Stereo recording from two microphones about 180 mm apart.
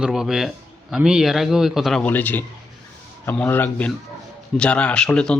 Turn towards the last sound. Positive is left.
turn(degrees=5)  # may be behind; listen again after turning